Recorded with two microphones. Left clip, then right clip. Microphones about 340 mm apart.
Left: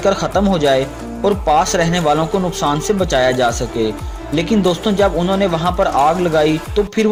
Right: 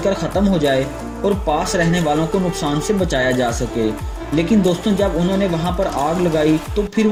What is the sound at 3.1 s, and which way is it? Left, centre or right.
A man's voice, left.